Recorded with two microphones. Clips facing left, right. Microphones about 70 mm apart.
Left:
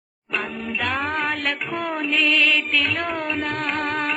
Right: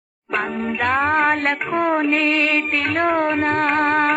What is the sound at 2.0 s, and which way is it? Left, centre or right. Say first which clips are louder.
Music: right 2 dB; right.